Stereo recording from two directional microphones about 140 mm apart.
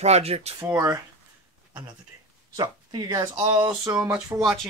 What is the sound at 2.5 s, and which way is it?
Speech, 30° right (ahead or behind).